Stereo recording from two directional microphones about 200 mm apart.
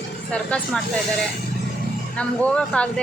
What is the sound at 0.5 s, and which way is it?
Speech, 5° left (ahead or behind).